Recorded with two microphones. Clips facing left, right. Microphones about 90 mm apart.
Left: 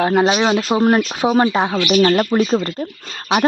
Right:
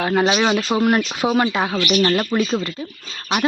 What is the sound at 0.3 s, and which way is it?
Speech, 25° left (ahead or behind).